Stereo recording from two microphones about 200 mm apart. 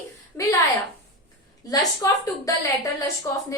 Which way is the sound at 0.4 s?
15° left (ahead or behind).